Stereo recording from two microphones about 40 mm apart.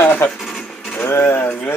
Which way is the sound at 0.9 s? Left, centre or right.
Left.